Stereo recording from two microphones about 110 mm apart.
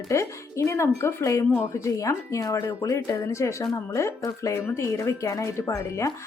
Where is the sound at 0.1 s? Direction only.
25° left (ahead or behind).